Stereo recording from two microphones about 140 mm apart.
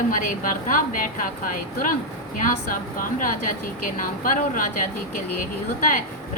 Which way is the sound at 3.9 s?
75° left (ahead or behind).